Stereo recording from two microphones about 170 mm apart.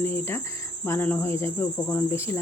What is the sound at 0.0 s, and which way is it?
Speech, 15° left (ahead or behind).